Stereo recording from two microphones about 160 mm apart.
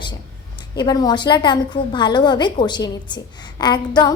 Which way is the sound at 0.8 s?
25° left (ahead or behind).